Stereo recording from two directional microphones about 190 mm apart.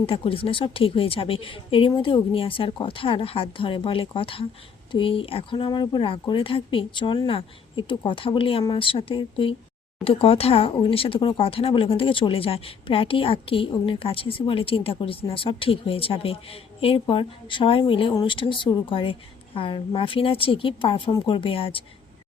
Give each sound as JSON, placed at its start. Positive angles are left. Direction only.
{"t": 0.0, "sound": "speech", "side_deg": 30}